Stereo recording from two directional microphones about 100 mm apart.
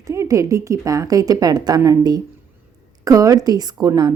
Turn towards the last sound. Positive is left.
turn(degrees=-45)  # may be behind; listen again after turning